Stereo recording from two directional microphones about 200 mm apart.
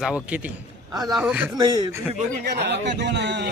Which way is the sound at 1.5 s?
20° right (ahead or behind).